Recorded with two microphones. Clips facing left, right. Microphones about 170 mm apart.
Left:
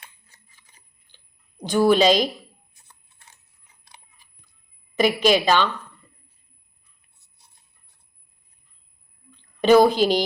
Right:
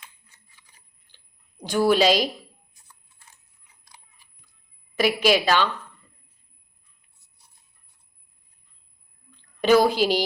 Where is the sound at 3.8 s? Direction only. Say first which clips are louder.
Left 2 dB; 25° left (ahead or behind).